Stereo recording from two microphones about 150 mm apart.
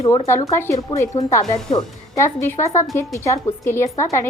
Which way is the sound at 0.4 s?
20° left (ahead or behind).